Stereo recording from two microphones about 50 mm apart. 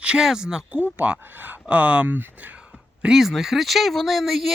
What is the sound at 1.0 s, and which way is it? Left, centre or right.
Speech, right.